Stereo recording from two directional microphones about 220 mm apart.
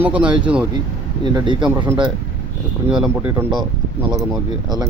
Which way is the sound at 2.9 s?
5° right (ahead or behind).